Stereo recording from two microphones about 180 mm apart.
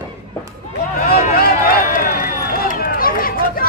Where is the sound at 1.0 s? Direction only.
55° left (ahead or behind).